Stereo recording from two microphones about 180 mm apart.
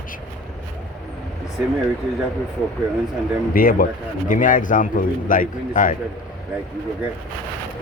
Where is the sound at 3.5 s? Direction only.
50° left (ahead or behind).